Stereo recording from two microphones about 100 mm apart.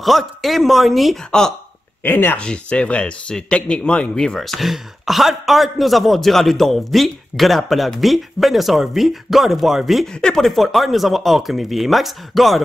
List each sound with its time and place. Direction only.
0.0 s a man's voice: centre (ahead or behind)
2.0 s a man's voice: 20° left (ahead or behind); by 12.6 s centre (ahead or behind)